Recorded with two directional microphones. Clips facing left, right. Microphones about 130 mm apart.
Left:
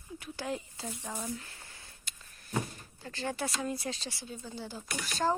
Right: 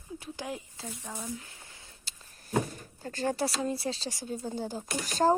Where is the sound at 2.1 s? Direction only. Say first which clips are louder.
Even; 30° right (ahead or behind).